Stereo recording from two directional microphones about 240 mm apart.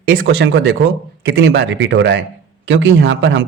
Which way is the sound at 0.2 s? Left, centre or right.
Right.